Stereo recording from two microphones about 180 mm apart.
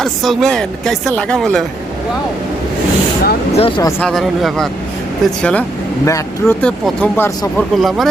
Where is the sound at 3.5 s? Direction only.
30° left (ahead or behind).